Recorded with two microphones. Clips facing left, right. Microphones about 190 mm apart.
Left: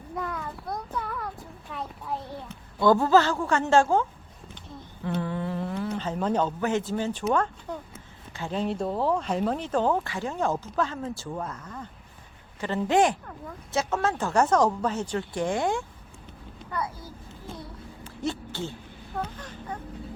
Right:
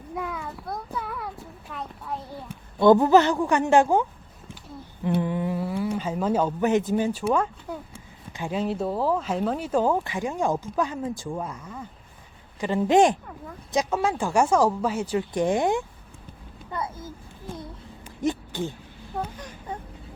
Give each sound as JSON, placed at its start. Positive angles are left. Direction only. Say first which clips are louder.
{"t": 0.1, "sound": "a sound", "louder": "right 1 dB", "side_deg": -10}
{"t": 0.9, "sound": "child singing", "louder": "even", "side_deg": -5}
{"t": 2.7, "sound": "speech", "louder": "right 4 dB", "side_deg": -20}
{"t": 5.0, "sound": "speech", "louder": "right 4 dB", "side_deg": -15}
{"t": 6.6, "sound": "speech", "louder": "right 5 dB", "side_deg": -20}
{"t": 15.3, "sound": "a child's voice", "louder": "right 4 dB", "side_deg": -20}
{"t": 17.6, "sound": "a sound", "louder": "right 1 dB", "side_deg": -15}